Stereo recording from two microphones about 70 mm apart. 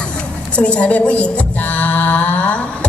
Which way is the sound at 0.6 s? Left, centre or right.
Centre.